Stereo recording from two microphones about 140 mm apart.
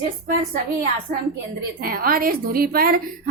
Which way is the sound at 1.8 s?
90° right.